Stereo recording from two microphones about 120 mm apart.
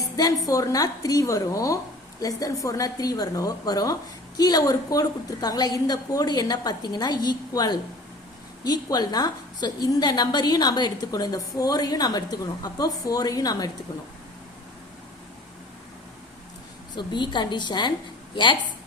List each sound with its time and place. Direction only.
0.2 s a woman's voice: 30° left (ahead or behind)
16.9 s a woman's voice: 40° left (ahead or behind)